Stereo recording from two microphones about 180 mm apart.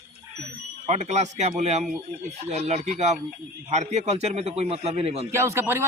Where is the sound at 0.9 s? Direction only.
40° right (ahead or behind).